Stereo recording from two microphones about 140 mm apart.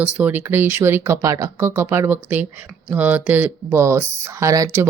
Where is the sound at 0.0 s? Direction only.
10° right (ahead or behind).